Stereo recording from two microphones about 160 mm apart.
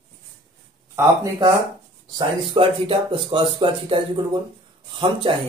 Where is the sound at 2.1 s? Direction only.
30° right (ahead or behind).